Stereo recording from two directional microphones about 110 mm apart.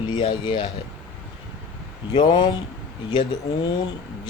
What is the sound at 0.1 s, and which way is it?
Speech, 45° left (ahead or behind).